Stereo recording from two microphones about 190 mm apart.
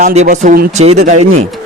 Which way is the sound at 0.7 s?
35° right (ahead or behind).